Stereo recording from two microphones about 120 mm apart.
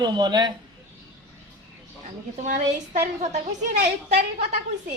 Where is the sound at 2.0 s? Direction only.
85° right; by 4.6 s 70° right (ahead or behind).